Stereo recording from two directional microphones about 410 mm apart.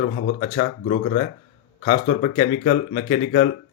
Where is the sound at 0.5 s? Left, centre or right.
Centre.